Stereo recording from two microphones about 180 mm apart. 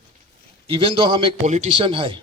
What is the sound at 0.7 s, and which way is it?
Speech, 30° right (ahead or behind).